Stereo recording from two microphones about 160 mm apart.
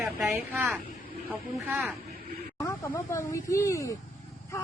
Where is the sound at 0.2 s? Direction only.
15° right (ahead or behind).